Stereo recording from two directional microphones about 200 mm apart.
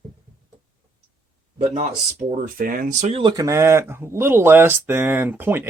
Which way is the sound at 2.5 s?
45° right (ahead or behind).